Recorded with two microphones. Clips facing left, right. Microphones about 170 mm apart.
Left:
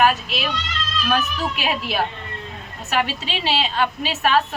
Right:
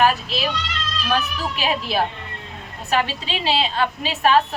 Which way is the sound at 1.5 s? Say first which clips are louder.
Right 5 dB; 35° right (ahead or behind).